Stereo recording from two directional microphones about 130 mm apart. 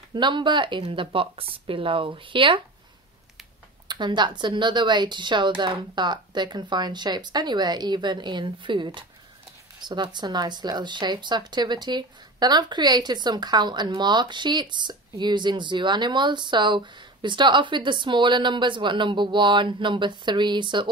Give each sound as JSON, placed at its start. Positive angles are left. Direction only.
{"t": 0.1, "sound": "speech", "side_deg": -35}
{"t": 3.8, "sound": "speech", "side_deg": -35}